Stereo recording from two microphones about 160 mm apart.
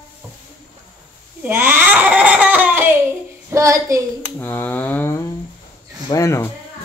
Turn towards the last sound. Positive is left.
turn(degrees=20)  # may be behind; listen again after turning